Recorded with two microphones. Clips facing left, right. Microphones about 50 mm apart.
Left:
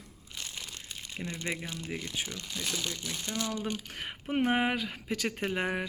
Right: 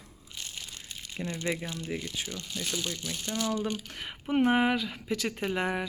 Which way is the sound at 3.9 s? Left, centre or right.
Left.